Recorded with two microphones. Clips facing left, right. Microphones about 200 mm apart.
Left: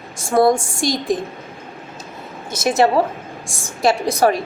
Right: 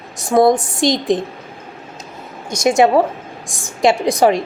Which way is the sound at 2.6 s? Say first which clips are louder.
Right 3 dB; 15° right (ahead or behind).